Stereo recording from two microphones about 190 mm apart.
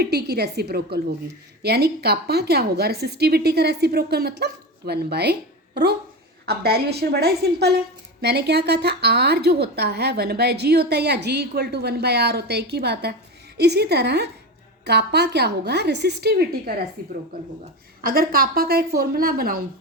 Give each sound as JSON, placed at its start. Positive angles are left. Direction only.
{"t": 0.0, "sound": "a woman's voice", "side_deg": -60}
{"t": 18.0, "sound": "a woman's voice", "side_deg": -50}